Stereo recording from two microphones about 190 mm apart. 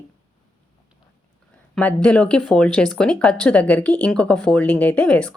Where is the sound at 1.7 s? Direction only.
5° left (ahead or behind).